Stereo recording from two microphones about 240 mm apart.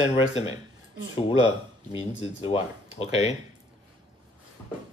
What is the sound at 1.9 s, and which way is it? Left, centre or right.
Speech, left.